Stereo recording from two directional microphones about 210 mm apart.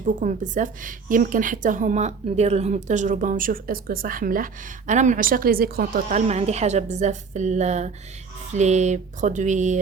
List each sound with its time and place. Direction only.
0.0 s a woman's voice: 35° right (ahead or behind)